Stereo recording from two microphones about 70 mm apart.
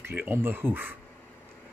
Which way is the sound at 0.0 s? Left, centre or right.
Right.